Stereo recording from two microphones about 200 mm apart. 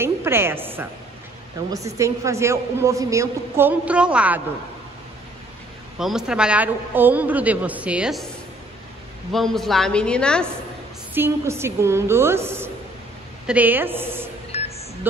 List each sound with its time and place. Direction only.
0.0 s a woman's voice: 10° right (ahead or behind)
5.9 s a man's voice: centre (ahead or behind)
9.3 s a woman's voice: centre (ahead or behind)
11.1 s a man's voice: 10° right (ahead or behind)
14.5 s a sound: 30° left (ahead or behind)